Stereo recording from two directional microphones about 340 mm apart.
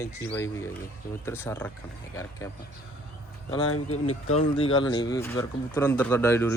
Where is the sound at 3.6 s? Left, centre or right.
Left.